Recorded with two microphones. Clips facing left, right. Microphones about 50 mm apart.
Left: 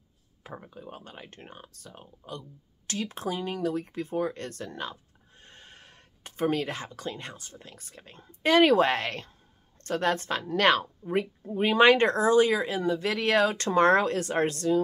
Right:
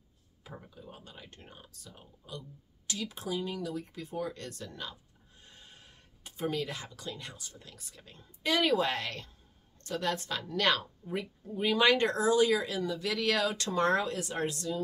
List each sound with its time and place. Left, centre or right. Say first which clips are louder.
0.6 s speech: left 6 dB; left
13.7 s speech: left 7 dB; left